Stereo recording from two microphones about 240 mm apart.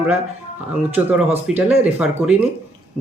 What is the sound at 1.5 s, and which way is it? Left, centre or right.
Speech, centre.